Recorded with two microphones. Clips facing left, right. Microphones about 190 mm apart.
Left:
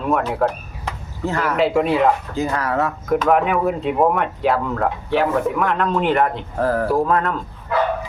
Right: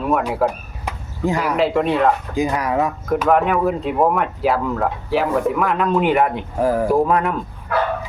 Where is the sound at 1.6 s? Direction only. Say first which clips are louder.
Left 2 dB; centre (ahead or behind).